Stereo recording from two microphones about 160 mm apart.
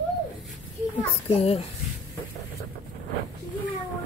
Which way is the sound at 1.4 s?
40° left (ahead or behind).